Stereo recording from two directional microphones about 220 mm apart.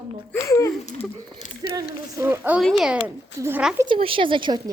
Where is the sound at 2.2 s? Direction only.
10° right (ahead or behind).